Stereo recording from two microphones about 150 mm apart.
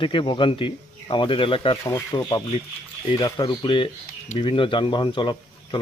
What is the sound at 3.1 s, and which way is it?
Speech, 30° left (ahead or behind).